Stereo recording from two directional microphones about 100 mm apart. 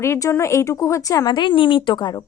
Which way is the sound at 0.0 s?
25° left (ahead or behind).